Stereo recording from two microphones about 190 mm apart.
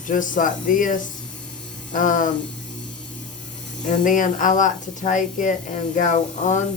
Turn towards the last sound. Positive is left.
turn(degrees=40)  # may be behind; listen again after turning